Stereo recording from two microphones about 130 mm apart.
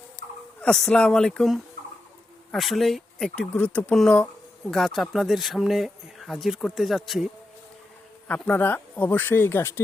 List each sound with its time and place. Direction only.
0.2 s speech: 10° left (ahead or behind)
8.3 s speech: 10° left (ahead or behind)